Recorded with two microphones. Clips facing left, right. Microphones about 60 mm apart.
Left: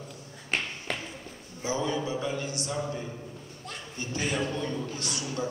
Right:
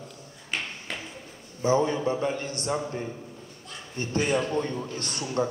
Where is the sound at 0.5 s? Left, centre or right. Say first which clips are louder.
Left 1 dB; left.